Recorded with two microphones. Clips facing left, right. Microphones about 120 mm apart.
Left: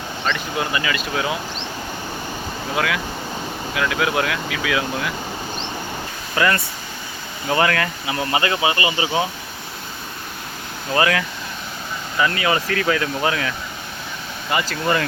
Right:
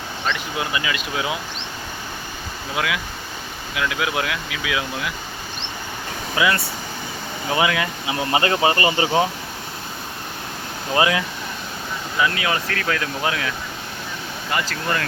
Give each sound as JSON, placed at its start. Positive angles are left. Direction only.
{"t": 0.3, "sound": "speech", "side_deg": -10}
{"t": 2.7, "sound": "speech", "side_deg": -10}
{"t": 6.3, "sound": "speech", "side_deg": -5}
{"t": 8.3, "sound": "speech", "side_deg": -35}
{"t": 10.9, "sound": "speech", "side_deg": -20}
{"t": 12.2, "sound": "speech", "side_deg": 0}
{"t": 14.5, "sound": "speech", "side_deg": 10}